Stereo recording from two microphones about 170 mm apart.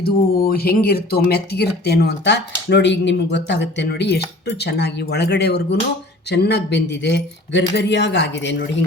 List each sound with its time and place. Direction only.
0.0 s speech: 60° left (ahead or behind); by 8.7 s 90° left